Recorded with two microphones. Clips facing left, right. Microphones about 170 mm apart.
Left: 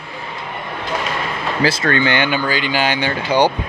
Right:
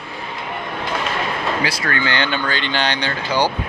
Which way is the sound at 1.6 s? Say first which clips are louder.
Left 5 dB; 25° left (ahead or behind).